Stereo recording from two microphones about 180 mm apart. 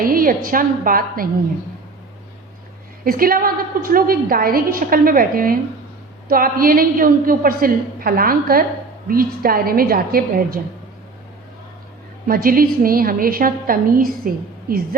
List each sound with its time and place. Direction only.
0.0 s a woman's voice: 50° right (ahead or behind)
3.0 s a woman's voice: 55° right (ahead or behind)
12.3 s a woman's voice: 55° right (ahead or behind)